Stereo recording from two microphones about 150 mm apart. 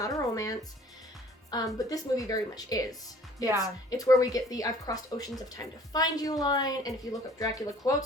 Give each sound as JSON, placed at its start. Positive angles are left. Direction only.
{"t": 0.0, "sound": "music", "side_deg": 25}
{"t": 1.8, "sound": "a woman's voice", "side_deg": 25}